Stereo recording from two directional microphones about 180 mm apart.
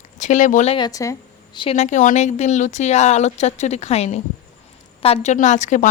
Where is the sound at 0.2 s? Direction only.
45° left (ahead or behind).